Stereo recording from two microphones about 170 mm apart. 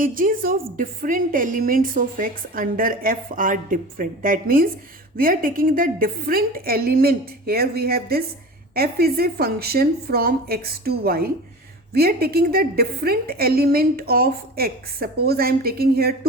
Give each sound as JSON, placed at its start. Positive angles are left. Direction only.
{"t": 0.0, "sound": "a woman's voice", "side_deg": -55}